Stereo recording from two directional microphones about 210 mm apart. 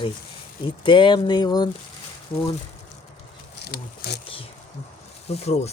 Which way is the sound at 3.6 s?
50° left (ahead or behind).